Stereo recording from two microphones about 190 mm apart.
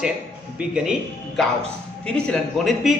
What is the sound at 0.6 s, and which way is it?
A man's voice, 5° right (ahead or behind).